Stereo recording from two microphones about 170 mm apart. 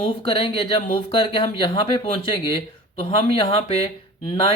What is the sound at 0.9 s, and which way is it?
Speech, 30° left (ahead or behind).